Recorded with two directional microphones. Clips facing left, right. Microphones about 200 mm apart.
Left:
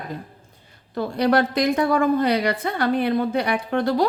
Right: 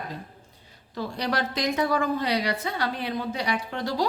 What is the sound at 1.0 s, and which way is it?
A woman's voice, 55° left (ahead or behind).